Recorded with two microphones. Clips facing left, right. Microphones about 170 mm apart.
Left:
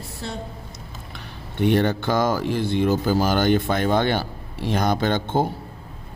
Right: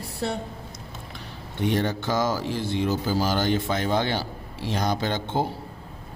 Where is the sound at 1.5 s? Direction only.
60° left (ahead or behind).